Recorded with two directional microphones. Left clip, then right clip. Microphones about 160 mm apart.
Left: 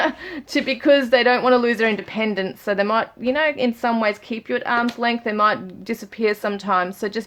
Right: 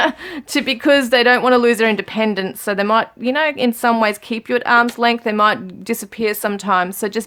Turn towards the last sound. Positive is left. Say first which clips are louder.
# right 3 dB
turn(degrees=-30)  # may be behind; listen again after turning